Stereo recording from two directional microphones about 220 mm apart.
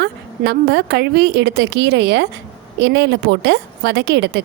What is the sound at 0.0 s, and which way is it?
A woman's voice, 50° right (ahead or behind).